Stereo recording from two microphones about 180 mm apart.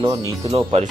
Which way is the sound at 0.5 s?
35° right (ahead or behind).